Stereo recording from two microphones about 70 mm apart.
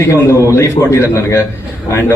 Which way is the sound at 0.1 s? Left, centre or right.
Left.